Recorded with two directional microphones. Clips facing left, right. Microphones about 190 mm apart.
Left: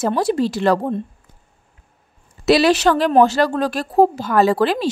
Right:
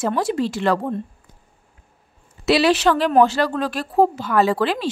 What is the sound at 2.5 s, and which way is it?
Speech, 40° left (ahead or behind).